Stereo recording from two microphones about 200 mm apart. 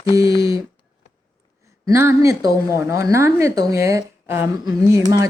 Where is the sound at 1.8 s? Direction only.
15° right (ahead or behind).